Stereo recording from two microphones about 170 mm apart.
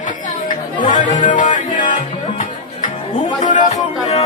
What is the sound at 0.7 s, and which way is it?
Speech, 50° left (ahead or behind).